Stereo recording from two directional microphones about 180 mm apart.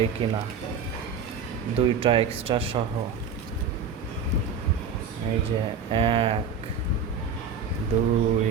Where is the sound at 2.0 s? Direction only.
30° right (ahead or behind).